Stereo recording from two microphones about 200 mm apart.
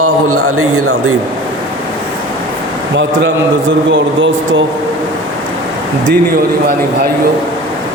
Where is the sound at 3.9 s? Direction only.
65° right (ahead or behind).